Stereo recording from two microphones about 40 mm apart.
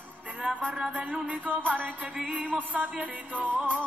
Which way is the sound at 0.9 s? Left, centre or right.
Right.